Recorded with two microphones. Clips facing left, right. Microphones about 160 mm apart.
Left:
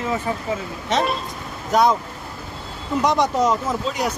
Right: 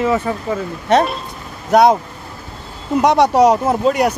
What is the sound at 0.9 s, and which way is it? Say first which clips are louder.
Speech: right 8 dB; 60° right (ahead or behind).